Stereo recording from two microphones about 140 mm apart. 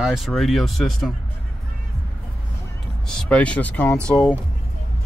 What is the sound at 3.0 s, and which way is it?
Speech, 5° left (ahead or behind).